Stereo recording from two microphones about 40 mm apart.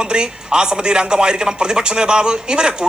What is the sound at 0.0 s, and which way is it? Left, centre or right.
A man's voice, right.